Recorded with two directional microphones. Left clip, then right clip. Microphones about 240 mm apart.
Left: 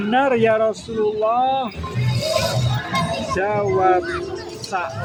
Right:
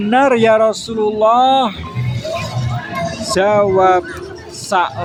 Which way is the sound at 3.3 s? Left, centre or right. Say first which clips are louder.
Right 8 dB; right.